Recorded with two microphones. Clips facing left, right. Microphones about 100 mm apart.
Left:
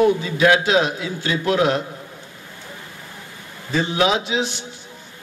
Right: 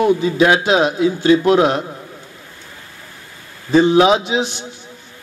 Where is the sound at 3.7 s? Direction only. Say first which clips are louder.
Right 8 dB; 25° right (ahead or behind).